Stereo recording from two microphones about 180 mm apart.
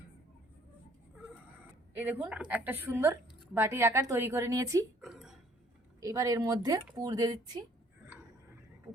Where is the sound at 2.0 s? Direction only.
10° right (ahead or behind).